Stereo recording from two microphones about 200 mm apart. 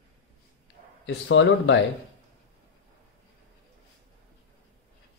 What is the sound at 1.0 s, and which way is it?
Speech, 65° left (ahead or behind).